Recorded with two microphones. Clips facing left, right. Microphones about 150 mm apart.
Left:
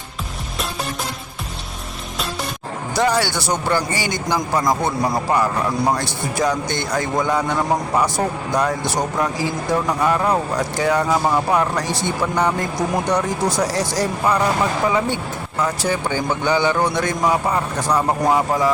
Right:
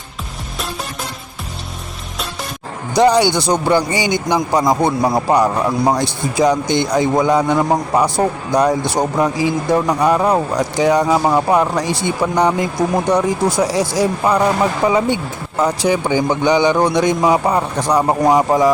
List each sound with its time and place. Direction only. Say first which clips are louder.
2.9 s speech: right 7 dB; 20° right (ahead or behind)